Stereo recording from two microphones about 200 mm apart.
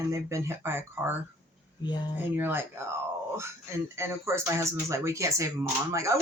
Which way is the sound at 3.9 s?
15° right (ahead or behind).